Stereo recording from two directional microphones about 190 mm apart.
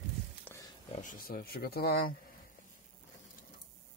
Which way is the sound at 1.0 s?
50° left (ahead or behind).